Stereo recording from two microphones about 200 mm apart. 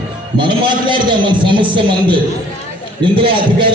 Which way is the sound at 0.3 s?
25° right (ahead or behind).